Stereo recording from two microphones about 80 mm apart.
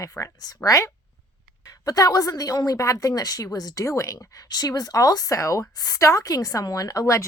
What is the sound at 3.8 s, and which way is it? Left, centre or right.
Speech, left.